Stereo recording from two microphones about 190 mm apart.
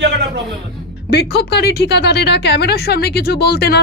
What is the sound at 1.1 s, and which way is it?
A woman's voice, 60° left (ahead or behind).